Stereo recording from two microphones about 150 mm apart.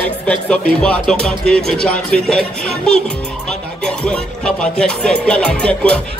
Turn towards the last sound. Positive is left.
turn(degrees=5)  # may be behind; listen again after turning